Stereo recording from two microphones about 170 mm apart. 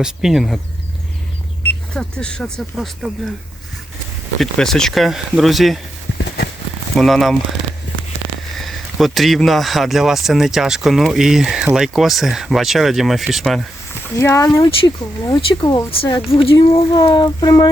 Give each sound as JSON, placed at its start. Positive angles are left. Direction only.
{"t": 0.0, "sound": "speech", "side_deg": 0}
{"t": 1.9, "sound": "speech", "side_deg": 5}
{"t": 4.4, "sound": "speech", "side_deg": 0}
{"t": 6.1, "sound": "clip-clop", "side_deg": 75}
{"t": 6.9, "sound": "speech", "side_deg": 0}
{"t": 8.5, "sound": "speech", "side_deg": 0}
{"t": 14.2, "sound": "speech", "side_deg": 20}